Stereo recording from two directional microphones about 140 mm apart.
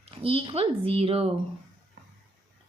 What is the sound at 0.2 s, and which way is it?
A woman's voice, 40° right (ahead or behind).